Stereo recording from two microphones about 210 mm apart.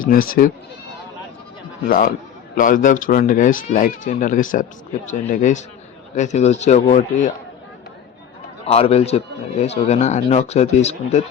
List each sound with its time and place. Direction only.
0.1 s speech: 45° left (ahead or behind)
1.9 s speech: 40° left (ahead or behind)
8.6 s speech: 30° left (ahead or behind)